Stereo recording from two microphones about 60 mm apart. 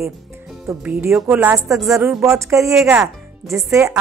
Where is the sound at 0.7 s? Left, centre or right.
Centre.